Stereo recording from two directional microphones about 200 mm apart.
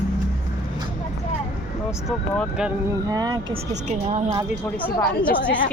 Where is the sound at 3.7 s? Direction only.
35° right (ahead or behind).